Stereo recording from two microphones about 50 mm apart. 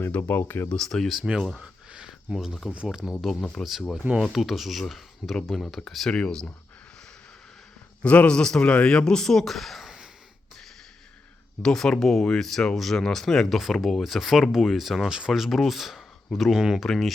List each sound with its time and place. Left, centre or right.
0.2 s speech: left
0.7 s speech: centre
1.2 s speech: centre
6.1 s a man's voice: left
8.0 s a man's voice: left
8.4 s speech: centre
11.6 s speech: centre
13.6 s speech: centre
16.6 s speech: centre
16.8 s speech: centre